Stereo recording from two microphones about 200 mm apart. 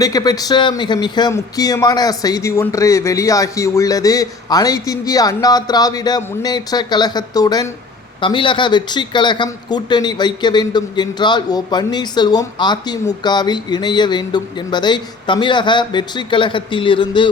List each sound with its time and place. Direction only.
0.0 s a man's voice: 20° left (ahead or behind)